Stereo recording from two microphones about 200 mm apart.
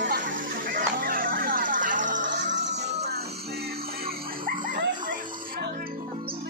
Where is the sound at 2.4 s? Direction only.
60° right (ahead or behind).